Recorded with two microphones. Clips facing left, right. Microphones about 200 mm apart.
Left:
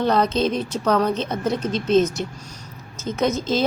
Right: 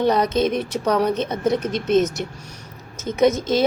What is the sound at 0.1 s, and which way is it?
A woman's voice, 20° right (ahead or behind).